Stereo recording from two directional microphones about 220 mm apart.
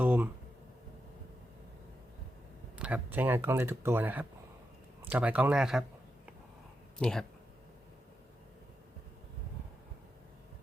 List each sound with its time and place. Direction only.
0.0 s a sound: 5° right (ahead or behind)
2.7 s speech: 5° right (ahead or behind)
7.0 s speech: 5° left (ahead or behind)